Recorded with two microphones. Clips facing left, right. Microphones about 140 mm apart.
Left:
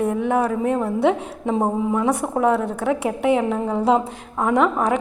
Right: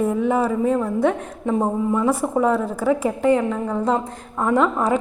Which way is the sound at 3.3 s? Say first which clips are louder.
Left 1 dB; 15° left (ahead or behind).